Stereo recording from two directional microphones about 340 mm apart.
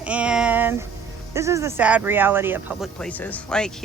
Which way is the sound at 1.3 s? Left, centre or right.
Centre.